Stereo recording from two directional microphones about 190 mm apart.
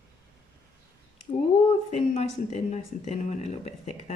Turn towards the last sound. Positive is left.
turn(degrees=35)  # may be behind; listen again after turning